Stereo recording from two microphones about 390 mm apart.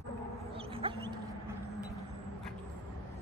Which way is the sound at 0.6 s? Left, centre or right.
Centre.